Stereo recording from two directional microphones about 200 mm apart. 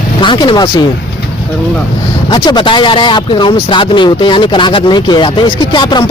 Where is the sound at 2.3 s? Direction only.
25° left (ahead or behind).